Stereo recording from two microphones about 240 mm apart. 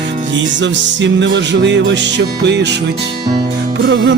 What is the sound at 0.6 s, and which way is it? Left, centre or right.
Music, right.